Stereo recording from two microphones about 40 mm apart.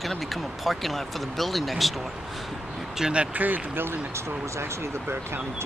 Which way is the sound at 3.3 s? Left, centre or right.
Right.